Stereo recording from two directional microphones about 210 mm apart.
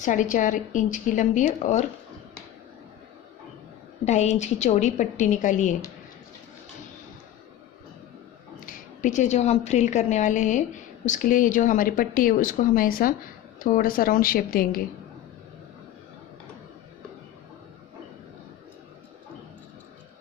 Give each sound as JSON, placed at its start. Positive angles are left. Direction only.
{"t": 0.0, "sound": "speech", "side_deg": 35}
{"t": 4.0, "sound": "speech", "side_deg": 35}
{"t": 8.5, "sound": "a woman's voice", "side_deg": 40}